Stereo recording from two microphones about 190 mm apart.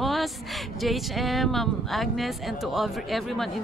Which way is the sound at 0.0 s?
Centre (ahead or behind).